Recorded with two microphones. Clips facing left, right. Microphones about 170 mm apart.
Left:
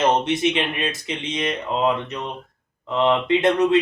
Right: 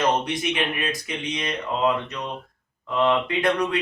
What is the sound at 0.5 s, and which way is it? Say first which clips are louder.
Speech: left 2 dB; 25° left (ahead or behind).